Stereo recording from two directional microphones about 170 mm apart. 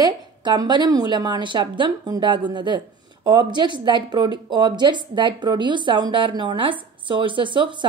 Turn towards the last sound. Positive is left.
turn(degrees=-30)  # may be behind; listen again after turning